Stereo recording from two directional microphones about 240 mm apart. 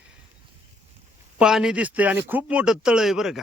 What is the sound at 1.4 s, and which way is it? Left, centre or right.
Speech, centre.